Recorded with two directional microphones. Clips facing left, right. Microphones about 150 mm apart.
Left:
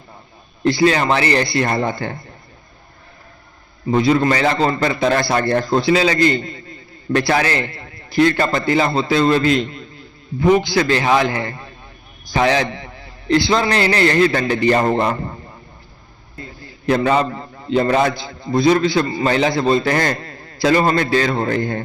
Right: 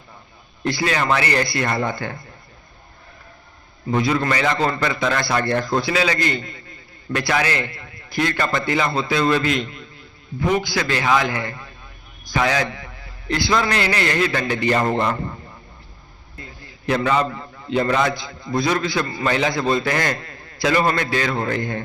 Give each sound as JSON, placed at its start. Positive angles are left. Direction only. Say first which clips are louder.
{"t": 0.6, "sound": "a man's voice", "louder": "left 7 dB", "side_deg": 30}
{"t": 3.9, "sound": "a man's voice", "louder": "left 5 dB", "side_deg": 30}
{"t": 16.8, "sound": "a man's voice", "louder": "left 4 dB", "side_deg": 35}